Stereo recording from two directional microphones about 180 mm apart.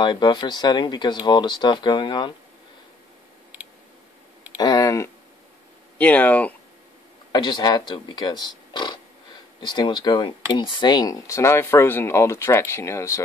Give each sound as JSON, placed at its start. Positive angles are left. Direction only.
{"t": 0.0, "sound": "speech", "side_deg": 25}
{"t": 4.6, "sound": "a sound", "side_deg": 20}
{"t": 5.9, "sound": "speech", "side_deg": 10}
{"t": 7.3, "sound": "speech", "side_deg": 25}